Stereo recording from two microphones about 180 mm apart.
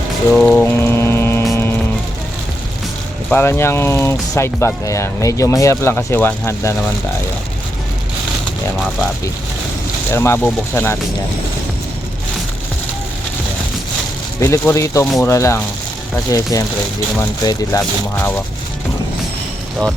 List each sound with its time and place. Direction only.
0.3 s mantra: 5° left (ahead or behind)
3.2 s speech: 10° left (ahead or behind)
10.1 s speech: 15° left (ahead or behind)
14.4 s speech: 15° left (ahead or behind)